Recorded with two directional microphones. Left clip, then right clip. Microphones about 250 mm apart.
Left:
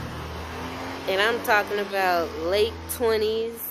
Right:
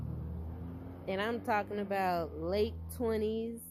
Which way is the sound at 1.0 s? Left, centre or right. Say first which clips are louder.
Left 12 dB; right.